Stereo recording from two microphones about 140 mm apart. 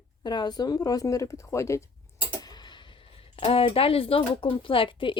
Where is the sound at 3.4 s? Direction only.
40° left (ahead or behind).